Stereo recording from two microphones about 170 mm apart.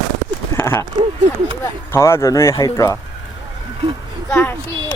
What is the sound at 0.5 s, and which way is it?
Speech, 15° left (ahead or behind).